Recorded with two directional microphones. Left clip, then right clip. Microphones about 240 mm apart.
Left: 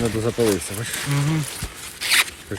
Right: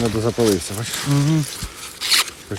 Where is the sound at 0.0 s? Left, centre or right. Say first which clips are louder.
Right 2 dB; right.